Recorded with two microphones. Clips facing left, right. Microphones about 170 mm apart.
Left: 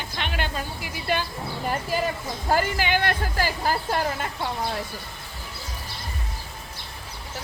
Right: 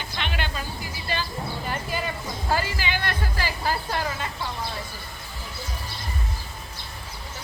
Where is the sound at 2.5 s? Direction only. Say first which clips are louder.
Left 4 dB; 50° left (ahead or behind).